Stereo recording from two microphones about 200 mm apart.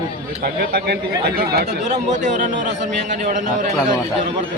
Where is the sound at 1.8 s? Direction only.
35° right (ahead or behind).